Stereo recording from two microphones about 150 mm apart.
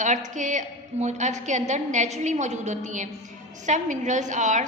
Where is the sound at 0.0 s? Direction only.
55° right (ahead or behind).